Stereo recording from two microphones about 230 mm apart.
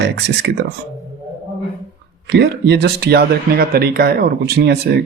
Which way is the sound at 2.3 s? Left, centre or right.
Right.